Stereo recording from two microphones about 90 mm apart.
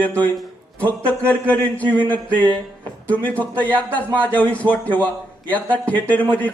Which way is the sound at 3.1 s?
15° left (ahead or behind).